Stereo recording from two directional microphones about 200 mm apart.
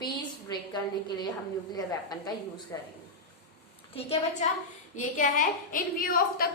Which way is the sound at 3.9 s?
30° left (ahead or behind).